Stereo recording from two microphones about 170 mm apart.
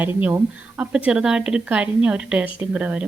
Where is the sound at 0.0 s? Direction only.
10° right (ahead or behind).